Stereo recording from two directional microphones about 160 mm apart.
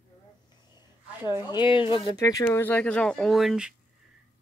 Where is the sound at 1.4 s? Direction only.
30° left (ahead or behind).